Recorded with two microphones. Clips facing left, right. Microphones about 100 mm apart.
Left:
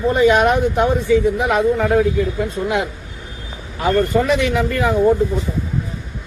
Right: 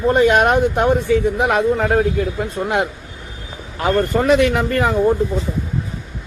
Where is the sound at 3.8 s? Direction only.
55° right (ahead or behind).